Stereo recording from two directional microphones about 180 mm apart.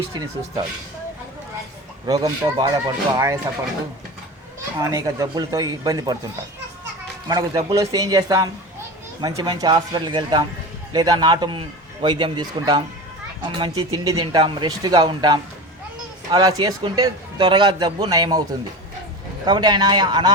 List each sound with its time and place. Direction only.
2.0 s a man's voice: 20° right (ahead or behind)
4.8 s a man's voice: 20° right (ahead or behind)
7.3 s a man's voice: 20° right (ahead or behind)
19.5 s a man's voice: 25° right (ahead or behind)